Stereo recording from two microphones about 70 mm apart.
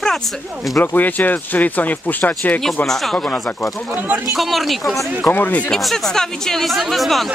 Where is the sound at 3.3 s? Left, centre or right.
Left.